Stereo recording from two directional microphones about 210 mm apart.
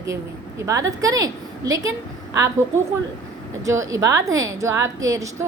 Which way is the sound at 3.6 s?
15° right (ahead or behind).